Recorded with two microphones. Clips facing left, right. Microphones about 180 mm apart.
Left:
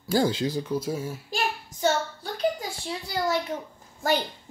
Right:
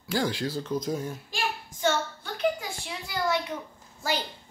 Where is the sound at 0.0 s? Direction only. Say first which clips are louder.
Left 5 dB; 35° left (ahead or behind); by 1.2 s 5° left (ahead or behind).